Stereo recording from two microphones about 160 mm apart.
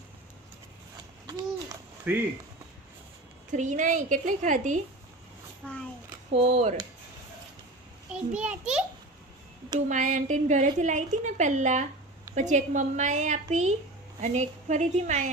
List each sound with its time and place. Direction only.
2.1 s a child's voice: 10° right (ahead or behind)
3.5 s a woman's voice: 50° right (ahead or behind)
5.6 s a child's voice: 5° left (ahead or behind)
6.3 s speech: 40° right (ahead or behind)
8.1 s a child's voice: 5° right (ahead or behind)
9.9 s a woman's voice: 50° right (ahead or behind)